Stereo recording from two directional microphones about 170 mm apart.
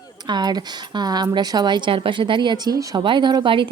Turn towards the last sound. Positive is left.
turn(degrees=-30)  # may be behind; listen again after turning